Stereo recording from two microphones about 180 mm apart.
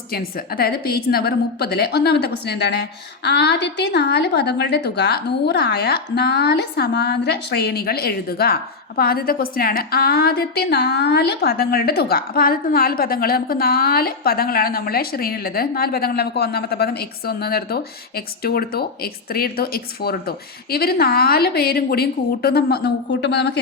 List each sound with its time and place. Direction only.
0.1 s a woman's voice: 55° left (ahead or behind)